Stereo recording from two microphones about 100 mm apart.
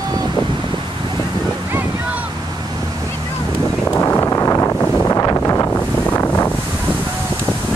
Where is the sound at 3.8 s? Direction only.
20° left (ahead or behind).